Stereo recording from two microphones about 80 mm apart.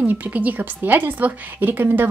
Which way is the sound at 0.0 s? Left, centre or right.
Centre.